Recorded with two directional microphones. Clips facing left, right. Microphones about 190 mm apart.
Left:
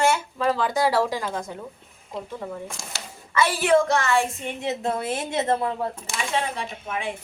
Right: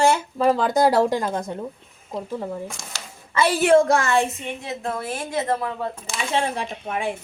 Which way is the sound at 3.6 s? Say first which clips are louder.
Right 4 dB; 50° right (ahead or behind).